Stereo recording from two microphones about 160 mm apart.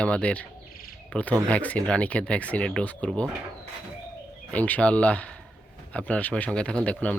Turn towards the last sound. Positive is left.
turn(degrees=10)  # may be behind; listen again after turning